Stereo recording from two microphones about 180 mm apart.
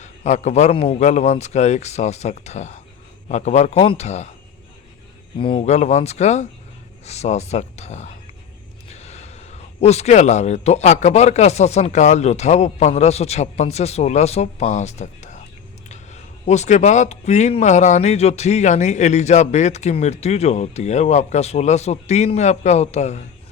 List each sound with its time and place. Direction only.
0.0 s speech: 40° left (ahead or behind)
5.4 s speech: 30° left (ahead or behind)
16.5 s speech: 40° left (ahead or behind)